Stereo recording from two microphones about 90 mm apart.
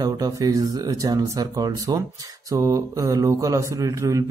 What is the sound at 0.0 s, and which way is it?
Speech, 40° right (ahead or behind).